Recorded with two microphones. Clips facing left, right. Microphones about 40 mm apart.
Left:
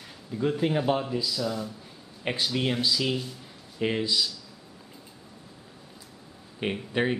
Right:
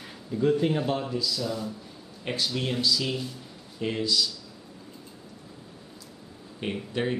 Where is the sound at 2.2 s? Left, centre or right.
Left.